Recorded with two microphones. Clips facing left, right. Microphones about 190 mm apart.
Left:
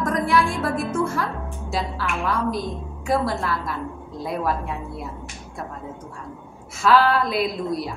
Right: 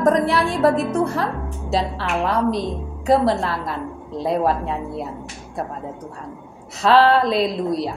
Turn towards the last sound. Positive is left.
turn(degrees=-30)  # may be behind; listen again after turning